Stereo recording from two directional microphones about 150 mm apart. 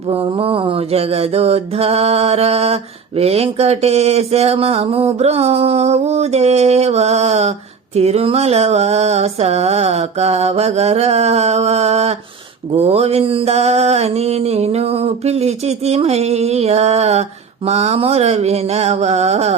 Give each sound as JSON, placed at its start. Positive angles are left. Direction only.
{"t": 0.1, "sound": "mantra", "side_deg": -40}